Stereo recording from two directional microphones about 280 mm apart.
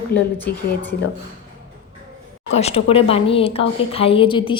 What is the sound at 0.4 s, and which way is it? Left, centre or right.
Speech, centre.